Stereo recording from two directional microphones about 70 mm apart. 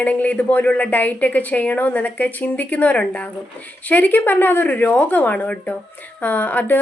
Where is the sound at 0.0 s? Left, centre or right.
Left.